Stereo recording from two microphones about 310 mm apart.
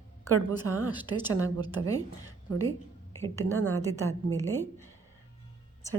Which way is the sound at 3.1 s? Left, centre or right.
Centre.